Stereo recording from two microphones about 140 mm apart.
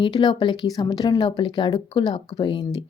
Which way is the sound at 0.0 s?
35° left (ahead or behind).